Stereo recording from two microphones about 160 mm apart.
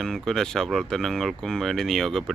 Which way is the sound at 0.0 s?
5° left (ahead or behind).